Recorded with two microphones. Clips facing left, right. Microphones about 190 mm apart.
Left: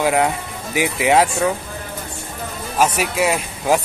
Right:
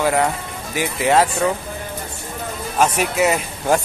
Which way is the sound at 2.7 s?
5° left (ahead or behind).